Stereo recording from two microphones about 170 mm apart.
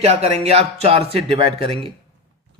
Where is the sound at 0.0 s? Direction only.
35° right (ahead or behind).